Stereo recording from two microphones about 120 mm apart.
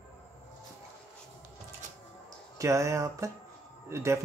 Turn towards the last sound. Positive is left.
turn(degrees=-25)  # may be behind; listen again after turning